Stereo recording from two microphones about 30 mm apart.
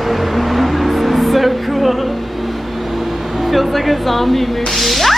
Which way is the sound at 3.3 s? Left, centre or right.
Centre.